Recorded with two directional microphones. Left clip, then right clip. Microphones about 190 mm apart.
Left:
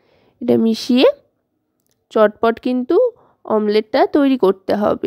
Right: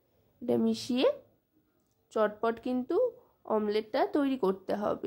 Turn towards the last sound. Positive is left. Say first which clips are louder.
# left 15 dB
turn(degrees=45)  # may be behind; listen again after turning